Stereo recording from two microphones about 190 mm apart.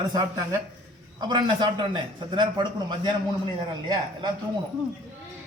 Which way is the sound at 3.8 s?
20° right (ahead or behind).